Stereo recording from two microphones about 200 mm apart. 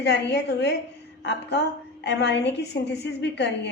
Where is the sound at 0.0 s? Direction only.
60° left (ahead or behind).